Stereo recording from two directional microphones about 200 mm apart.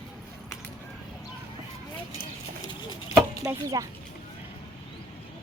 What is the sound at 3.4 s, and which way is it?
Speech, 15° right (ahead or behind).